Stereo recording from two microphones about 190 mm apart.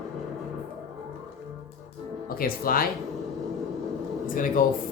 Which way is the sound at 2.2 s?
50° left (ahead or behind).